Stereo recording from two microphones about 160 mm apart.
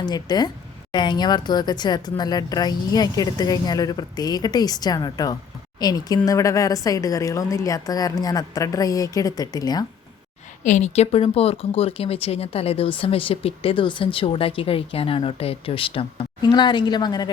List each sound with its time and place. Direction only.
0.0 s speech: 25° left (ahead or behind)
10.6 s speech: 50° left (ahead or behind); by 17.3 s 25° left (ahead or behind)